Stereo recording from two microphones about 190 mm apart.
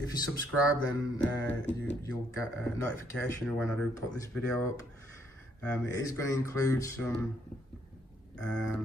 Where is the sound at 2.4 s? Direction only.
15° left (ahead or behind).